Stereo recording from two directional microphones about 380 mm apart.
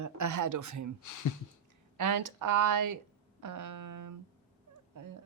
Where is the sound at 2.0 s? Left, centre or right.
Right.